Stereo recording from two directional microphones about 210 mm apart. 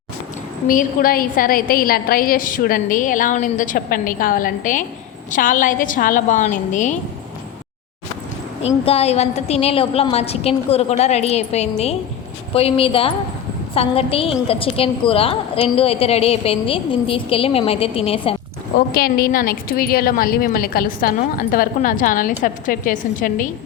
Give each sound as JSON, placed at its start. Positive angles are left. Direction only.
{"t": 0.7, "sound": "a woman's voice", "side_deg": 40}
{"t": 8.6, "sound": "a woman's voice", "side_deg": 30}
{"t": 18.9, "sound": "a woman's voice", "side_deg": 45}